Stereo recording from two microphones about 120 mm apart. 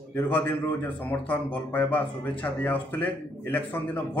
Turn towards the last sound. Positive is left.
turn(degrees=15)  # may be behind; listen again after turning